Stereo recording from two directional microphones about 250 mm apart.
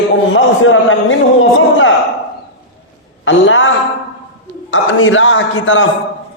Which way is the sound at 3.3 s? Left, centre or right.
Left.